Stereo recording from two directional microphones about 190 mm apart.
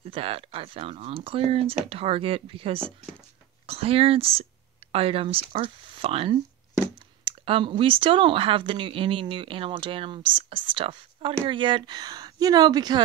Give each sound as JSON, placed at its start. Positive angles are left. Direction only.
{"t": 0.1, "sound": "speech", "side_deg": -30}